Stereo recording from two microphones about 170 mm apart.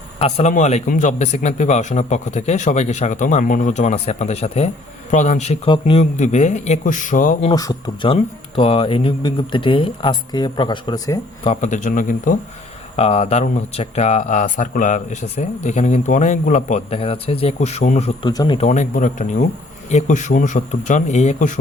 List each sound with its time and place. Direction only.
0.2 s speech: 40° left (ahead or behind)
7.5 s speech: 25° left (ahead or behind)
11.4 s speech: 45° left (ahead or behind)
13.0 s speech: 40° left (ahead or behind)
18.3 s speech: 25° left (ahead or behind)
18.6 s speech: 45° left (ahead or behind)